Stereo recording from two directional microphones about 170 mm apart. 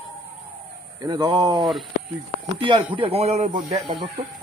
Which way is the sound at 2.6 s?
30° right (ahead or behind).